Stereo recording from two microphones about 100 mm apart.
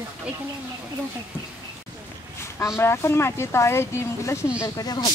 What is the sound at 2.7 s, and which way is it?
Speech, 25° left (ahead or behind).